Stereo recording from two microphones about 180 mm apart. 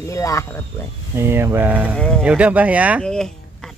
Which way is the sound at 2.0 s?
5° left (ahead or behind).